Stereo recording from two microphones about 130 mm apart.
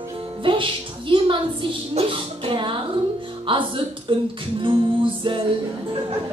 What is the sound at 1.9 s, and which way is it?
Music, 40° right (ahead or behind).